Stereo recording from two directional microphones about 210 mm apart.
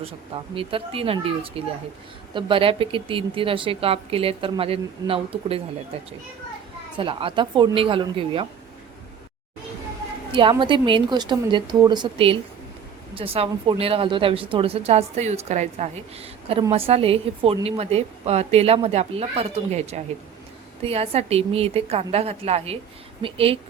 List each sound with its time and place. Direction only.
0.5 s speech: 25° right (ahead or behind)
10.3 s speech: 25° right (ahead or behind)